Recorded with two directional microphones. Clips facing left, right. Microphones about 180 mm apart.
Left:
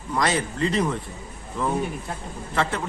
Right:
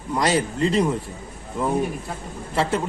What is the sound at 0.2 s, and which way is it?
Speech, 35° right (ahead or behind).